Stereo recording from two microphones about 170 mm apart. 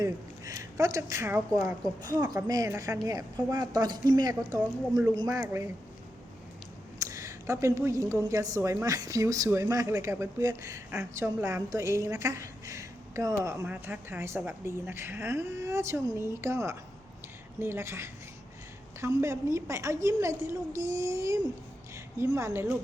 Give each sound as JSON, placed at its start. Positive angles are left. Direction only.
{"t": 0.0, "sound": "a woman's voice", "side_deg": -20}
{"t": 7.0, "sound": "a woman's voice", "side_deg": -20}